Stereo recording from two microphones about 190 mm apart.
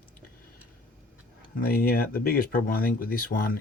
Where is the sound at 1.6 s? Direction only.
50° left (ahead or behind).